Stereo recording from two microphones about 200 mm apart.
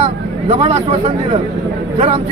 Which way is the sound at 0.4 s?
30° right (ahead or behind).